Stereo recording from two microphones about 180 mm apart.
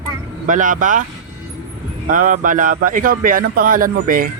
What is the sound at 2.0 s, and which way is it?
A man's voice, 50° right (ahead or behind).